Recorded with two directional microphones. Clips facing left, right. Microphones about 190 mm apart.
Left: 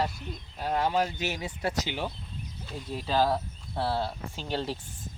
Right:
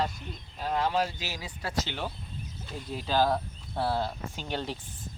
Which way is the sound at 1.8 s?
10° left (ahead or behind).